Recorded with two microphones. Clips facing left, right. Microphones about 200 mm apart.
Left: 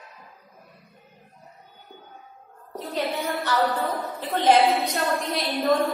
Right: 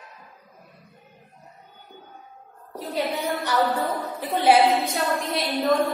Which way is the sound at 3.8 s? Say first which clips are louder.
Even; centre (ahead or behind).